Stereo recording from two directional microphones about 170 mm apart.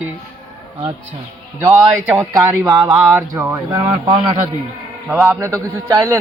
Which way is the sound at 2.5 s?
20° right (ahead or behind).